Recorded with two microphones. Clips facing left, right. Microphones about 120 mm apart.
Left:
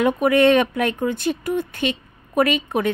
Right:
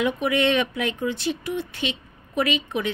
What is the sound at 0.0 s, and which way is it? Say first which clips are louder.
Speech: left 6 dB; 50° left (ahead or behind).